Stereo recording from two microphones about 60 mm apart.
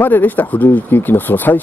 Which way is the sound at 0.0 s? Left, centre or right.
Left.